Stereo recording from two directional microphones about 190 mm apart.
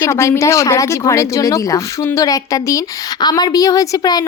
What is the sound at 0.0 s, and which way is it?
Speech, 15° left (ahead or behind).